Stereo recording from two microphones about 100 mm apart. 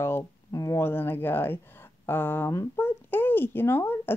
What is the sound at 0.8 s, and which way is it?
A child's voice, 20° left (ahead or behind).